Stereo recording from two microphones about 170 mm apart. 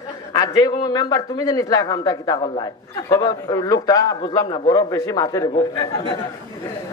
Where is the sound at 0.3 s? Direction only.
20° left (ahead or behind).